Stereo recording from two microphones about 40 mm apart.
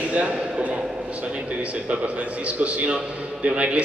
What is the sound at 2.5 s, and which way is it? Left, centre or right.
A man's voice, right.